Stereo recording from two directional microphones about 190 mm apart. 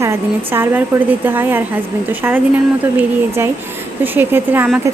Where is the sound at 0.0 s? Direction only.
15° right (ahead or behind).